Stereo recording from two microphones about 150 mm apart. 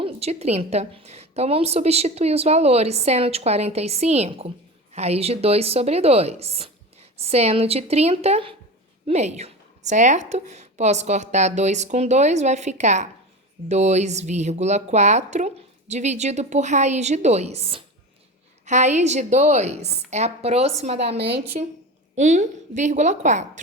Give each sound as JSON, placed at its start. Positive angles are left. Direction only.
{"t": 0.0, "sound": "a woman's voice", "side_deg": -45}
{"t": 18.6, "sound": "a woman's voice", "side_deg": -50}
{"t": 21.2, "sound": "a woman's voice", "side_deg": -90}
{"t": 22.1, "sound": "a woman's voice", "side_deg": -55}